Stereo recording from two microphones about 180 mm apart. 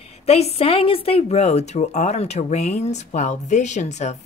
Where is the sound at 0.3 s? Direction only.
35° left (ahead or behind).